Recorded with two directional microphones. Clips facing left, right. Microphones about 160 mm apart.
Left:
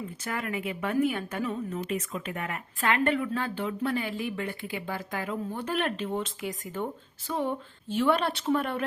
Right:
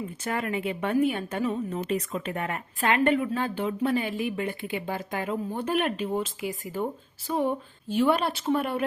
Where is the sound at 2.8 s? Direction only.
20° right (ahead or behind).